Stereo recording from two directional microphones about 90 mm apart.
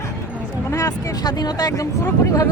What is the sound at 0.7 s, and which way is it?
Speech, 35° left (ahead or behind).